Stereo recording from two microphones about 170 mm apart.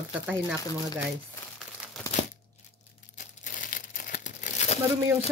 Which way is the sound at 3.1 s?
50° left (ahead or behind).